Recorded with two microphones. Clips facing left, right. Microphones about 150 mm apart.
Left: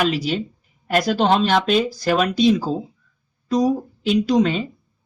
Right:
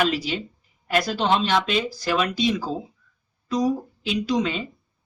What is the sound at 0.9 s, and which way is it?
Speech, 45° left (ahead or behind).